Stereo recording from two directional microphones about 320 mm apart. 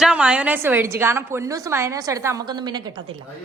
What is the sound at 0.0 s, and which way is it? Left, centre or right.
A woman's voice, centre.